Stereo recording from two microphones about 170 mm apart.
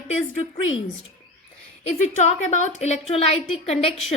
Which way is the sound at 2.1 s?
40° left (ahead or behind).